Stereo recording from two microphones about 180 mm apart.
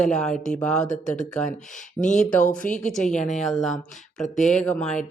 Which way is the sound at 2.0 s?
45° left (ahead or behind).